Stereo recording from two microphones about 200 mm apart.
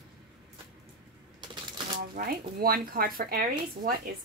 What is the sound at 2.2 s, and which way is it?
A woman's voice, 45° right (ahead or behind).